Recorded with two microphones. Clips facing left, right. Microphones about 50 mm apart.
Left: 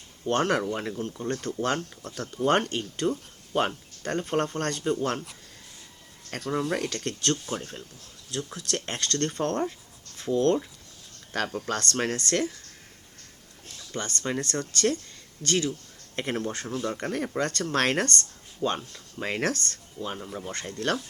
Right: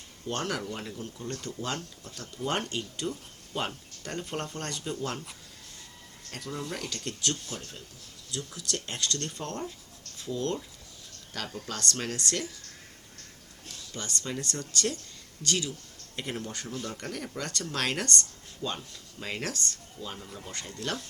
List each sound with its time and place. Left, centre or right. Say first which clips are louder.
0.3 s speech: left 8 dB; left
6.3 s speech: left 8 dB; left
7.4 s speech: left 7 dB; left
13.9 s speech: left 5 dB; left
16.7 s speech: left 7 dB; centre
17.0 s speech: left 8 dB; left